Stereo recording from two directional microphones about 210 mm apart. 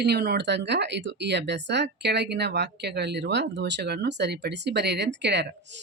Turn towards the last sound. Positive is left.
turn(degrees=-55)  # may be behind; listen again after turning